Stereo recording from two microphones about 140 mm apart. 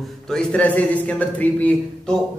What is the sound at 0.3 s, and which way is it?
Speech, 5° left (ahead or behind).